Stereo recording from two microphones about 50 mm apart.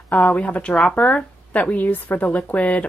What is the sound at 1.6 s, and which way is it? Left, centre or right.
Speech, left.